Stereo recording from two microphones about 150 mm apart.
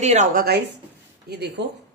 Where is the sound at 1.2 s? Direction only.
90° right.